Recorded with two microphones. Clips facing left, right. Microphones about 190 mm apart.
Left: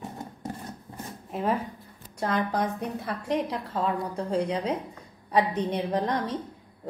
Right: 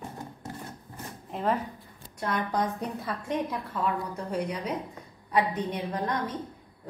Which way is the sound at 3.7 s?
30° left (ahead or behind).